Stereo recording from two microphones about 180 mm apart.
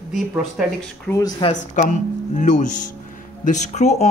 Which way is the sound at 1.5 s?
45° left (ahead or behind).